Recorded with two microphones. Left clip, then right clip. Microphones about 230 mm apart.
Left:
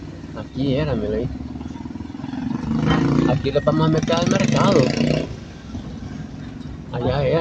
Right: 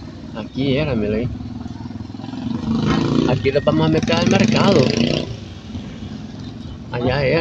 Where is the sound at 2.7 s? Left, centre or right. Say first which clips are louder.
Right 1 dB; right.